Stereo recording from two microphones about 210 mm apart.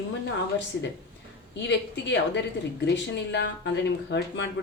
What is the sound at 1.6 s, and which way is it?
Speech, 55° left (ahead or behind).